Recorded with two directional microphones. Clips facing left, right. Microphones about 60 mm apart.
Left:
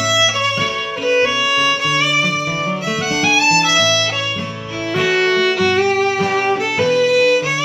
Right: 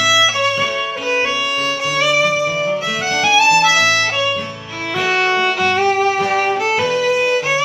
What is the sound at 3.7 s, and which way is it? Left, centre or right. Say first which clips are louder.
Harmonica: right 2 dB; right.